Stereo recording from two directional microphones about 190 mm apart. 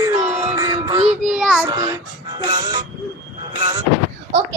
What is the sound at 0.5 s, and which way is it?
Music, 20° right (ahead or behind).